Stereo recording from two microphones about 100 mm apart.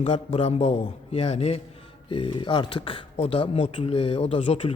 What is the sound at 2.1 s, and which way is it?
Speech, 55° left (ahead or behind).